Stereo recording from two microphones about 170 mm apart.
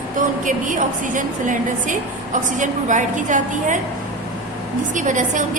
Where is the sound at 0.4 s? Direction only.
50° right (ahead or behind).